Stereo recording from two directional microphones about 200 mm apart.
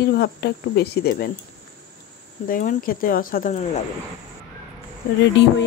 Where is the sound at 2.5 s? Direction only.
40° left (ahead or behind).